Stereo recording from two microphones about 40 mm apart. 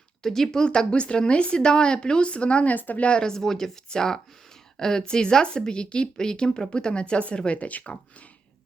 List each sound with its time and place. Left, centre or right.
0.2 s speech: centre; by 2.6 s left
2.6 s a woman's voice: left
3.0 s speech: left
3.2 s speech: centre; by 7.9 s left